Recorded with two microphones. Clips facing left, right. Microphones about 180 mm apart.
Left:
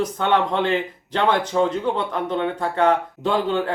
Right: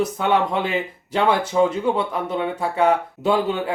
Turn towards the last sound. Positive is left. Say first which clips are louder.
# right 1 dB
turn(degrees=-10)  # may be behind; listen again after turning